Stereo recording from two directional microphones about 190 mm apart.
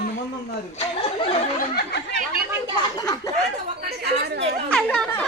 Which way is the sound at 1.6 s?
60° left (ahead or behind).